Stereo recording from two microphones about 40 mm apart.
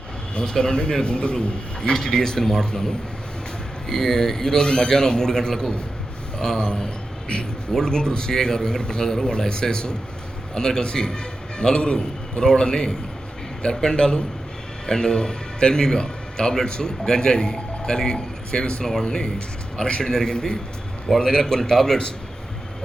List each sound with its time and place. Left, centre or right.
0.3 s a man's voice: centre